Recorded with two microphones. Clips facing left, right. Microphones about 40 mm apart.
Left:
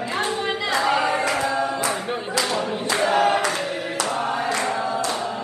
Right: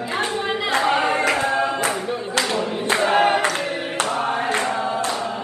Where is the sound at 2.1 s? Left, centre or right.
Left.